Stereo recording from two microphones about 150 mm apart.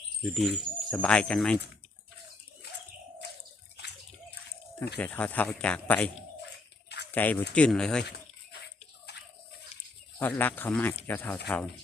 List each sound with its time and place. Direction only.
0.3 s speech: centre (ahead or behind)
4.9 s speech: 10° left (ahead or behind)
7.1 s speech: 10° left (ahead or behind)
10.2 s speech: 15° left (ahead or behind)